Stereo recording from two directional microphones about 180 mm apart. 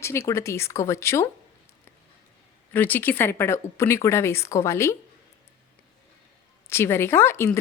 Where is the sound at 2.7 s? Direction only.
10° left (ahead or behind).